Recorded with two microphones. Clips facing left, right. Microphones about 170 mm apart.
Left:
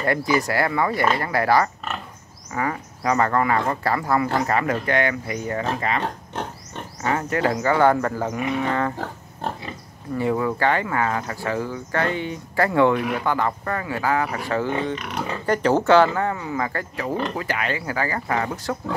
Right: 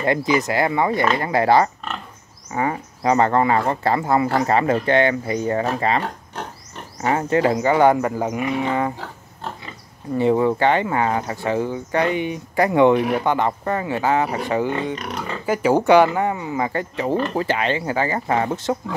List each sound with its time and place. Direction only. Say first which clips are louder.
0.0 s speech: right 2 dB; 20° right (ahead or behind)
10.1 s speech: right 5 dB; 25° right (ahead or behind)